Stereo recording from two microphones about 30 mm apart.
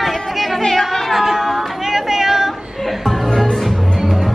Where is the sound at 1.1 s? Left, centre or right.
Centre.